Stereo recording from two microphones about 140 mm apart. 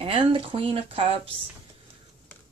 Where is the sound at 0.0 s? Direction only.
40° right (ahead or behind).